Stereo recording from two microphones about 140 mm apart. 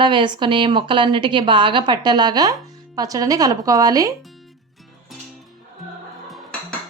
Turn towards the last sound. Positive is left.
turn(degrees=0)  # may be behind; listen again after turning